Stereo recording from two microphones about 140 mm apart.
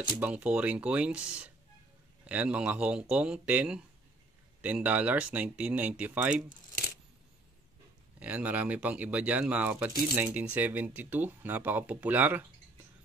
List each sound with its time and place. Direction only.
0.0 s speech: 10° right (ahead or behind)
8.2 s speech: 10° right (ahead or behind)